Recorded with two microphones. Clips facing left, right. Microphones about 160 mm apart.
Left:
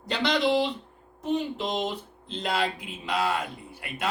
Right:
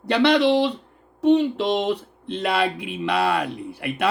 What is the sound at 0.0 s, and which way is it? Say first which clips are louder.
Speech: right 8 dB; 65° right (ahead or behind).